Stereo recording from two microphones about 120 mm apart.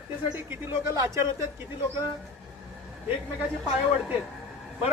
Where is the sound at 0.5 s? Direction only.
20° right (ahead or behind).